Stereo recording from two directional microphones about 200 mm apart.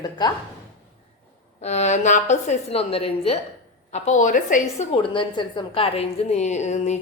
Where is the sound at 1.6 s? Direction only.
35° left (ahead or behind).